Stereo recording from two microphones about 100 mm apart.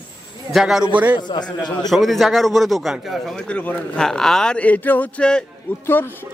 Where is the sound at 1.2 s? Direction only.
45° left (ahead or behind).